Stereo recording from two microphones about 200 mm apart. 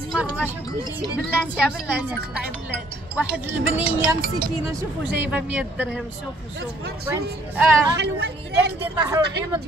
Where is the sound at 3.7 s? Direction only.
10° right (ahead or behind).